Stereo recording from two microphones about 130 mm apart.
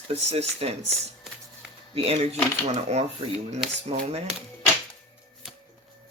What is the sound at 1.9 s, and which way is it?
Speech, 45° right (ahead or behind).